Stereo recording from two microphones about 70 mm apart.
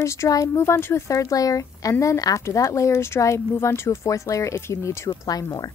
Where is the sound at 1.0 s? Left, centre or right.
Left.